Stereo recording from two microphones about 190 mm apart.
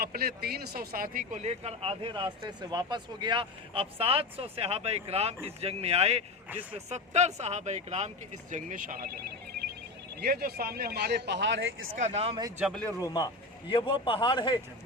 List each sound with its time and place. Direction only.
0.0 s speech: 55° right (ahead or behind)
10.2 s speech: 55° right (ahead or behind); by 11.9 s 75° right (ahead or behind)
11.9 s speech: 35° right (ahead or behind)
12.5 s a man's voice: centre (ahead or behind)
13.0 s speech: 20° left (ahead or behind)